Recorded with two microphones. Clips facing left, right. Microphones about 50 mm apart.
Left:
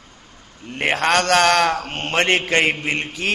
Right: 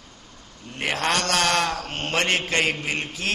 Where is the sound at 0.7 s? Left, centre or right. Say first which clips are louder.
Left 6 dB; left.